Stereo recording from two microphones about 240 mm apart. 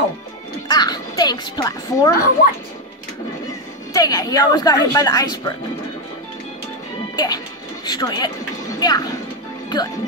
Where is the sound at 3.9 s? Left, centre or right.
Centre.